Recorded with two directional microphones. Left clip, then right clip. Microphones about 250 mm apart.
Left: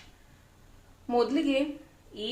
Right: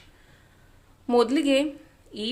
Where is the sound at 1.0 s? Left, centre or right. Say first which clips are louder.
Right 5 dB; right.